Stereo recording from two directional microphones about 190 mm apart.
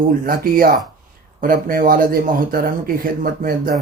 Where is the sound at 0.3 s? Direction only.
50° right (ahead or behind).